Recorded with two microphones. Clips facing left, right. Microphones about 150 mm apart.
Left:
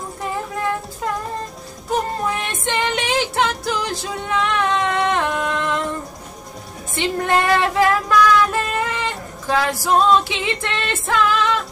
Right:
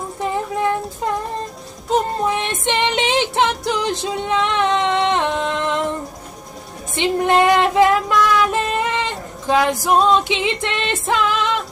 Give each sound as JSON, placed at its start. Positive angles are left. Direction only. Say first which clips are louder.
{"t": 0.2, "sound": "child singing", "louder": "right 4 dB", "side_deg": -20}
{"t": 1.9, "sound": "music", "louder": "right 3 dB", "side_deg": -20}
{"t": 7.0, "sound": "child singing", "louder": "right 4 dB", "side_deg": -20}
{"t": 9.8, "sound": "music", "louder": "left 2 dB", "side_deg": -20}